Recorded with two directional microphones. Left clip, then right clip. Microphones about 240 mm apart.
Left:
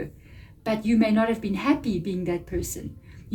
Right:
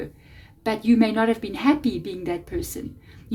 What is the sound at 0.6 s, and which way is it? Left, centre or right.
A woman's voice, right.